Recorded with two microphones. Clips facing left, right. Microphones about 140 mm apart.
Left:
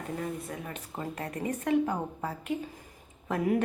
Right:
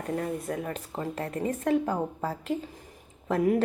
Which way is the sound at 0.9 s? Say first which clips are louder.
Right 2 dB; 25° right (ahead or behind).